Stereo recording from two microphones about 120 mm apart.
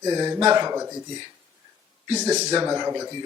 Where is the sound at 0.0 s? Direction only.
30° right (ahead or behind).